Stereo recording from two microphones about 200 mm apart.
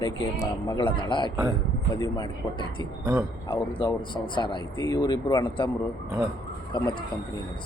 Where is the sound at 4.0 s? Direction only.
25° left (ahead or behind).